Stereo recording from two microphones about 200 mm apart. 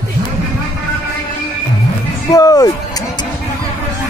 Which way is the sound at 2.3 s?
20° left (ahead or behind).